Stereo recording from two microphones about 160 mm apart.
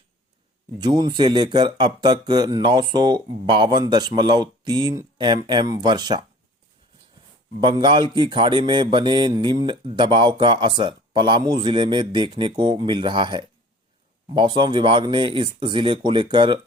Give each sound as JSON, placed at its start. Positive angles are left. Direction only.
{"t": 0.8, "sound": "speech", "side_deg": -25}
{"t": 7.6, "sound": "speech", "side_deg": -30}